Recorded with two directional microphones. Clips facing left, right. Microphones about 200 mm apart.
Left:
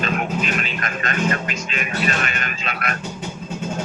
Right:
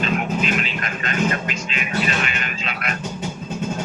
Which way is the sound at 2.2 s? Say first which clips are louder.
Even; 45° left (ahead or behind).